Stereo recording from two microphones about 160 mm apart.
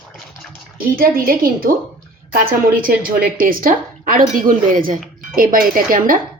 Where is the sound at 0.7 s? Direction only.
65° right (ahead or behind).